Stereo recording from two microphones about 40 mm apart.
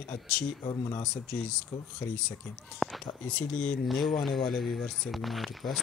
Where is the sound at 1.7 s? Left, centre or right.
Left.